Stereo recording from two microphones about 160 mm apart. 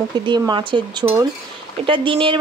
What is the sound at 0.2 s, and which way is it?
Speech, 30° right (ahead or behind).